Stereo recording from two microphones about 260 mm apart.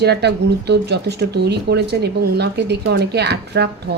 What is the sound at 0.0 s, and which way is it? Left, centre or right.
Speech, right.